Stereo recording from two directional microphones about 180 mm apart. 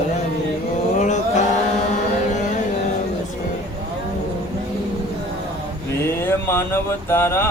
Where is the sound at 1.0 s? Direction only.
40° left (ahead or behind).